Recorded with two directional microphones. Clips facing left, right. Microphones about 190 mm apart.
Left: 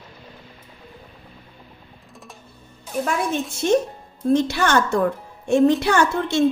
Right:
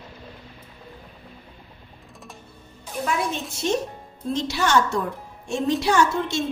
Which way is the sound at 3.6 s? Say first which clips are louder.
Left 5 dB; 55° left (ahead or behind).